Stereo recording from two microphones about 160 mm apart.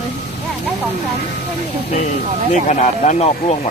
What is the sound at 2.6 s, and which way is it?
Speech, 45° left (ahead or behind).